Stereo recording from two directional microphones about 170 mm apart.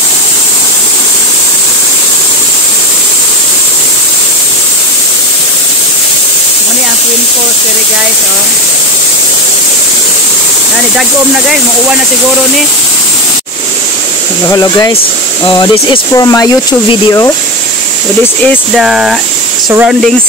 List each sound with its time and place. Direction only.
11.0 s speech: 5° right (ahead or behind)
14.5 s speech: 20° left (ahead or behind)
18.8 s speech: centre (ahead or behind)